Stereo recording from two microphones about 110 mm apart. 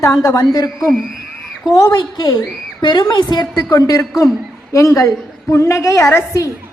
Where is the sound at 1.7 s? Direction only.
35° left (ahead or behind).